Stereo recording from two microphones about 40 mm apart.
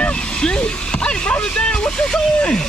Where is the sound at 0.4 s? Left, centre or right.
Left.